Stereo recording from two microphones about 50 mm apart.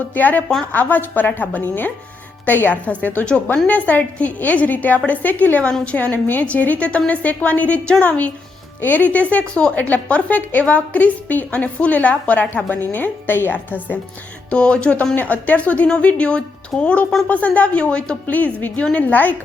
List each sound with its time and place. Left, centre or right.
0.1 s a woman's voice: left
2.8 s a woman's voice: left
14.5 s a woman's voice: left
15.1 s a woman's voice: left
18.3 s a woman's voice: left